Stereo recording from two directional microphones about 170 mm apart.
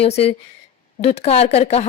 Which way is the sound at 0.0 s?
35° left (ahead or behind).